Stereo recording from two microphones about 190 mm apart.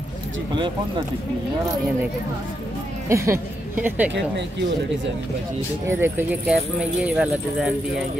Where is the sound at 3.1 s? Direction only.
15° right (ahead or behind).